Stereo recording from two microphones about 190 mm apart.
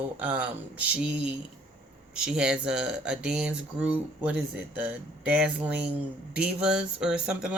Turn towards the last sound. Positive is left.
turn(degrees=-5)  # may be behind; listen again after turning